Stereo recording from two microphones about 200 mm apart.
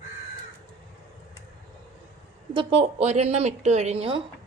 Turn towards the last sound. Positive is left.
turn(degrees=-30)  # may be behind; listen again after turning